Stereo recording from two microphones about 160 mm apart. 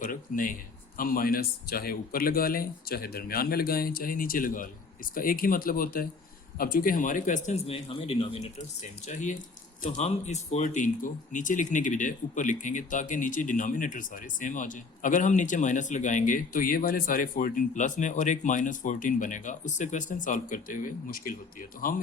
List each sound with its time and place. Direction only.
0.0 s a sound: 60° left (ahead or behind)
0.9 s speech: 60° left (ahead or behind); by 8.4 s 35° left (ahead or behind)
9.0 s speech: 50° left (ahead or behind)